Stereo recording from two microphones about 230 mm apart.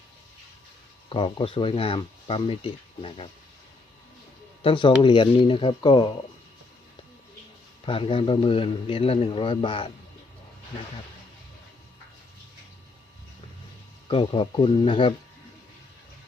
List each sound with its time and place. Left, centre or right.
1.1 s a man's voice: left
4.6 s a man's voice: left
7.9 s a man's voice: left
14.1 s a man's voice: left